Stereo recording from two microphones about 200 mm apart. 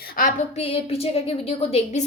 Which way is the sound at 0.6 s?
30° left (ahead or behind).